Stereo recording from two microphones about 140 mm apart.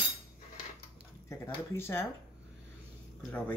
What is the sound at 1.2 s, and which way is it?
Speech, 15° left (ahead or behind).